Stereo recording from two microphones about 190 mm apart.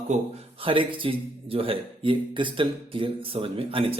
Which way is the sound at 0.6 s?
30° right (ahead or behind).